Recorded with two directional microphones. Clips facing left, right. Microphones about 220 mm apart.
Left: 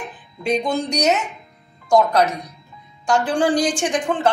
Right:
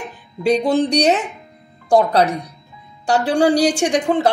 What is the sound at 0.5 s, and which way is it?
Speech, 35° right (ahead or behind).